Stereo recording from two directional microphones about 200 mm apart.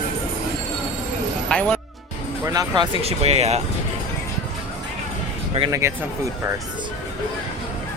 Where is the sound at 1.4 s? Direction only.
5° left (ahead or behind).